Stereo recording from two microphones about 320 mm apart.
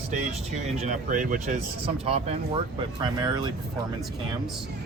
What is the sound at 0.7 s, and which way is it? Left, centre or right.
Speech, right.